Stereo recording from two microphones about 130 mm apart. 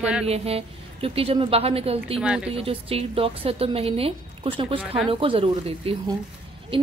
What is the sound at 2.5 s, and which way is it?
A woman's voice, 45° right (ahead or behind).